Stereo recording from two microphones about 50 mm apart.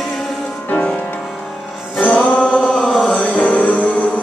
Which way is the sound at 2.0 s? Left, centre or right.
Left.